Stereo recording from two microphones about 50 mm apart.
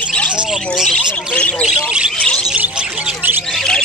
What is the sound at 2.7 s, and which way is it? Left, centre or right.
Squawk, centre.